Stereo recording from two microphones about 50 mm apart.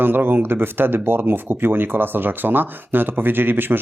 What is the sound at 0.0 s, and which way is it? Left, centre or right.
Speech, right.